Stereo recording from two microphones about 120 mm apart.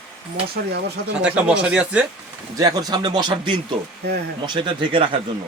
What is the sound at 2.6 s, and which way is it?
Speech, 30° right (ahead or behind).